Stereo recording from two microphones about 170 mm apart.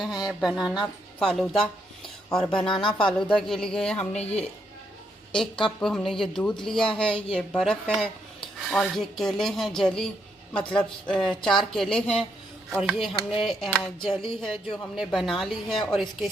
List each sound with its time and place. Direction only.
0.0 s speech: centre (ahead or behind)
2.7 s speech: 30° left (ahead or behind)
3.1 s speech: 5° left (ahead or behind)
4.2 s speech: 40° left (ahead or behind)
5.8 s speech: 5° left (ahead or behind)
7.1 s speech: 35° left (ahead or behind)
7.3 s speech: 5° left (ahead or behind)
12.8 s speech: 5° right (ahead or behind)